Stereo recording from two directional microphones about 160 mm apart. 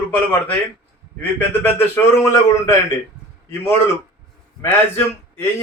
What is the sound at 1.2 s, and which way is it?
A man's voice, 15° left (ahead or behind).